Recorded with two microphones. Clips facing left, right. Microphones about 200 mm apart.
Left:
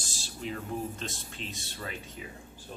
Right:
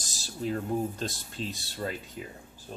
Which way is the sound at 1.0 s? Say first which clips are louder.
Right 5 dB; 35° right (ahead or behind).